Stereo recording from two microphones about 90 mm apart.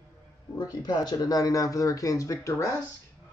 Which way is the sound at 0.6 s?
45° left (ahead or behind).